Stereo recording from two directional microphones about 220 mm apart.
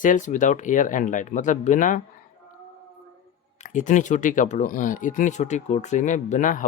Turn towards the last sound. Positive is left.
turn(degrees=35)  # may be behind; listen again after turning